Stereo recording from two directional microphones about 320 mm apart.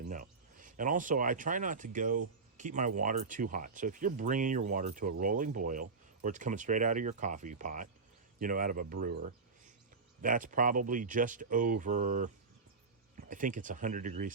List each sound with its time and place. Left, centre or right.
0.0 s speech: right